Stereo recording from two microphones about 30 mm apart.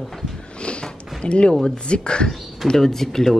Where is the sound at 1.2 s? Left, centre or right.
Left.